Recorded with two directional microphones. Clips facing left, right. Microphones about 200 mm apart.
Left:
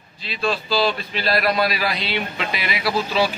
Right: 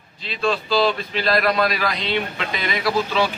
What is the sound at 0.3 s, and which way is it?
A man's voice, 5° left (ahead or behind).